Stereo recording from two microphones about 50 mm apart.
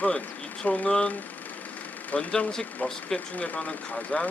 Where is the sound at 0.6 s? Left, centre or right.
Left.